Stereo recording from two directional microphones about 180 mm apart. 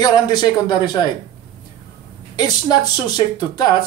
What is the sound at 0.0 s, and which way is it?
Speech, 20° left (ahead or behind).